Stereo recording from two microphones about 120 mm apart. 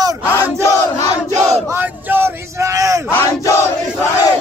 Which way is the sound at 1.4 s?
15° right (ahead or behind).